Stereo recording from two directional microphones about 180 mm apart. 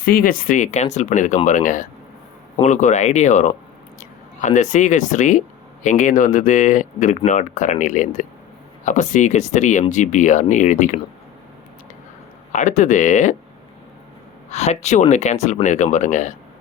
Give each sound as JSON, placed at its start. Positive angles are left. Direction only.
{"t": 0.0, "sound": "speech", "side_deg": 55}
{"t": 12.5, "sound": "speech", "side_deg": 45}
{"t": 14.5, "sound": "speech", "side_deg": 40}